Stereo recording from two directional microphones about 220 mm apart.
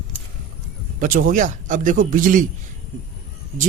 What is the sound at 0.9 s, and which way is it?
Speech, 40° right (ahead or behind).